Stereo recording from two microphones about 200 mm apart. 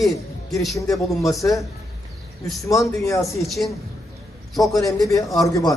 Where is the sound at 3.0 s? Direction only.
15° left (ahead or behind).